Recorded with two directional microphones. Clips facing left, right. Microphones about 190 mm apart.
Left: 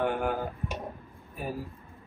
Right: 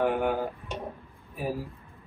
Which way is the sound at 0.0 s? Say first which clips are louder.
Right 3 dB; centre (ahead or behind).